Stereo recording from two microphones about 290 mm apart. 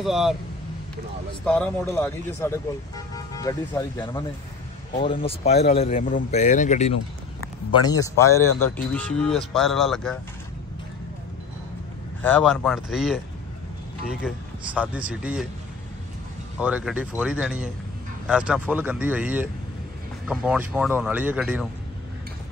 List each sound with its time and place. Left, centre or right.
0.0 s speech: centre
1.4 s speech: centre
4.9 s speech: centre
5.5 s speech: left
7.8 s speech: centre
12.2 s speech: centre
16.5 s speech: centre